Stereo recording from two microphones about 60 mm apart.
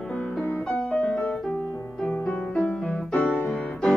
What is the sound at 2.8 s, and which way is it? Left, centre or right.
Music, centre.